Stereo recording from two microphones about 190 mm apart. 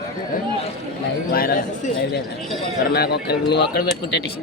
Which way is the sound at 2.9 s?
55° left (ahead or behind).